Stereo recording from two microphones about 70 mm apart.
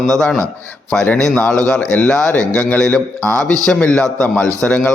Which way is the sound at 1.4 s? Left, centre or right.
Centre.